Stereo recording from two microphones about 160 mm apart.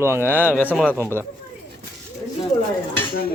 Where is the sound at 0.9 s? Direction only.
15° right (ahead or behind).